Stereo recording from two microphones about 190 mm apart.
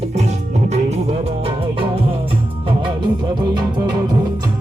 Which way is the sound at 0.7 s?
35° right (ahead or behind).